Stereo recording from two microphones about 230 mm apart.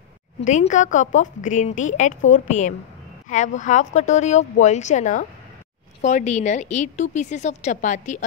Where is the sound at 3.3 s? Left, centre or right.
Left.